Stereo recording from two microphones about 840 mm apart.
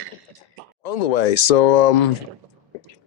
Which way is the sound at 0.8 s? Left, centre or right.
Left.